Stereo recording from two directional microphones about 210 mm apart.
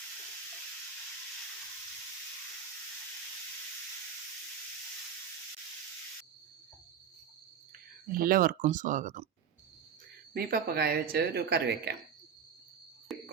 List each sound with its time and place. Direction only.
8.0 s speech: 45° right (ahead or behind)
10.3 s speech: 50° right (ahead or behind)